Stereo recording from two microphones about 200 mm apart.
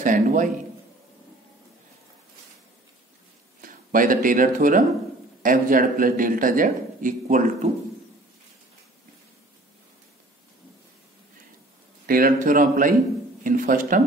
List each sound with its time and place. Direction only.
0.0 s a sound: 40° right (ahead or behind)
3.6 s a man's voice: 45° right (ahead or behind)
12.1 s a man's voice: 45° right (ahead or behind)